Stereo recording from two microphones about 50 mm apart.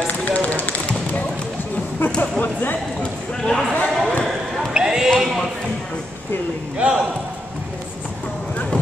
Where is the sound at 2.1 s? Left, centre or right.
Left.